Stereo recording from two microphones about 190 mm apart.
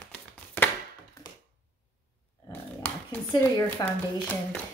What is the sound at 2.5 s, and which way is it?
Dog, 10° left (ahead or behind).